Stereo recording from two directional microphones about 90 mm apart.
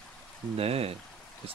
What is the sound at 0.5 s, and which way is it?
Speech, 90° right.